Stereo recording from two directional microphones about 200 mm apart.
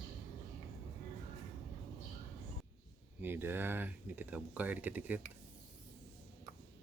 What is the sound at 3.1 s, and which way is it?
Speech, 10° right (ahead or behind).